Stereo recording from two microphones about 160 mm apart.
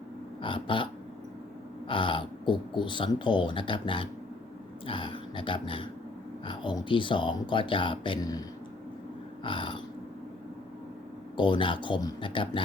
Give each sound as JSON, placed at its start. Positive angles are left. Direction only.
{"t": 0.4, "sound": "speech", "side_deg": 30}
{"t": 1.9, "sound": "speech", "side_deg": 30}
{"t": 11.3, "sound": "speech", "side_deg": 30}